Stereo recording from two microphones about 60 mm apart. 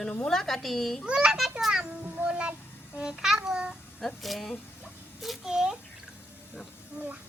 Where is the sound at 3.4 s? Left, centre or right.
Centre.